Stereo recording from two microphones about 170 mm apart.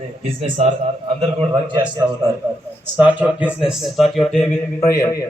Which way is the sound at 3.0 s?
10° right (ahead or behind).